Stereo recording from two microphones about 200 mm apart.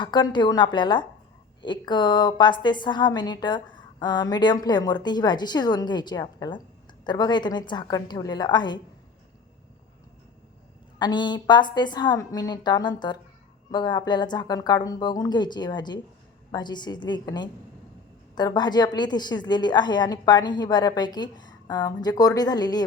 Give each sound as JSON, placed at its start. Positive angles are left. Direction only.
{"t": 0.0, "sound": "a woman's voice", "side_deg": 20}
{"t": 10.9, "sound": "a woman's voice", "side_deg": 20}